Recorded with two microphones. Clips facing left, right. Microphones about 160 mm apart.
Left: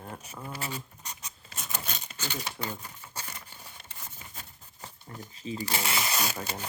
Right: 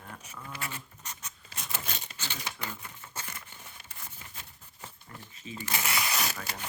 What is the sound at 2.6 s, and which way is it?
Crumpling, 35° left (ahead or behind).